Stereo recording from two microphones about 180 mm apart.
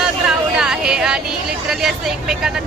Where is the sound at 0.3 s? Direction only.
5° right (ahead or behind).